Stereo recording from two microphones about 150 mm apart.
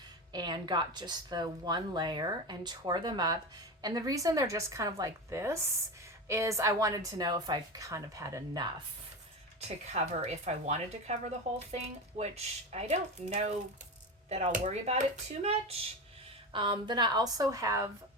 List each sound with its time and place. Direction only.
0.3 s a woman's voice: 30° right (ahead or behind)
9.6 s a woman's voice: 45° right (ahead or behind); by 17.9 s 20° right (ahead or behind)